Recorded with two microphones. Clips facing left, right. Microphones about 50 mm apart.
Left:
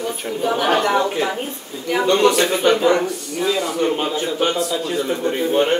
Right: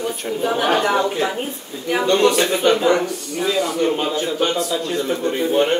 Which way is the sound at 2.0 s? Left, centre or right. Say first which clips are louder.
Left 1 dB; centre.